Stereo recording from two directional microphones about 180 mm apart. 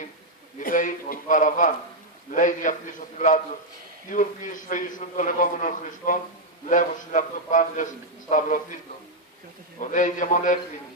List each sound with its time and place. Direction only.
0.6 s a man's voice: 50° left (ahead or behind)
9.8 s a man's voice: 45° left (ahead or behind)